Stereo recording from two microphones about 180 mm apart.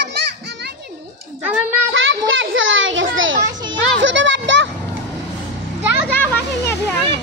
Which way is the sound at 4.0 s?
90° right.